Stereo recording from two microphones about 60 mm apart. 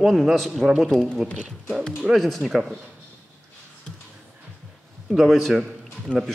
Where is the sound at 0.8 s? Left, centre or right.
Centre.